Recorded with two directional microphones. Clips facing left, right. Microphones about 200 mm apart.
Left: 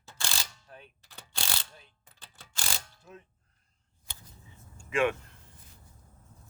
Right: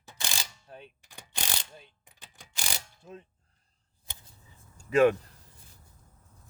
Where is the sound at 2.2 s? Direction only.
15° right (ahead or behind).